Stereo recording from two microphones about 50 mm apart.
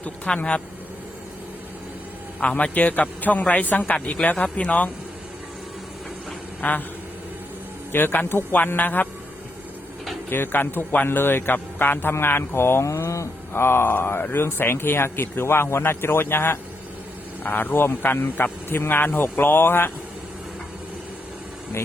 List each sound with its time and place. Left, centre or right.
0.3 s speech: centre
2.4 s speech: left
6.6 s speech: left
7.9 s speech: left
10.2 s speech: left
12.8 s speech: left
13.5 s speech: left
17.4 s speech: left